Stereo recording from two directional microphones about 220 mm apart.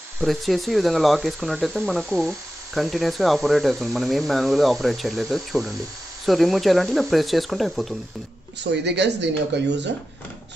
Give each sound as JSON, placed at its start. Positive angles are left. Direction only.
{"t": 0.2, "sound": "speech", "side_deg": 0}
{"t": 8.8, "sound": "speech", "side_deg": -50}